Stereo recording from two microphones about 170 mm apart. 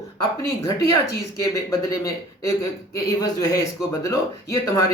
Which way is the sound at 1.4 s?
20° left (ahead or behind).